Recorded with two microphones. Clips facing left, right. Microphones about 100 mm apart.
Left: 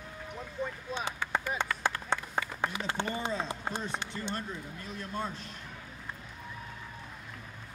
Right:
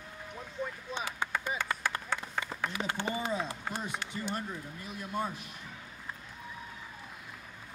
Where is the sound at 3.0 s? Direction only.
25° left (ahead or behind).